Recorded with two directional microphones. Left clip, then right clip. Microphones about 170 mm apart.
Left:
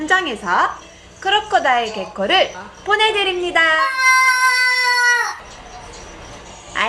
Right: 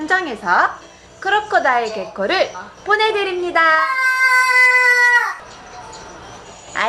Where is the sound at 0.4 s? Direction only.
5° left (ahead or behind).